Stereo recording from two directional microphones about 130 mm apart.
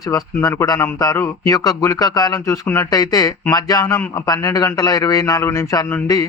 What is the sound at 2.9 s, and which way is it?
A man's voice, 30° left (ahead or behind).